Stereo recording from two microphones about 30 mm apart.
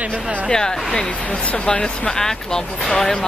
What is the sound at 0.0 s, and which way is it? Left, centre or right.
Speech, right.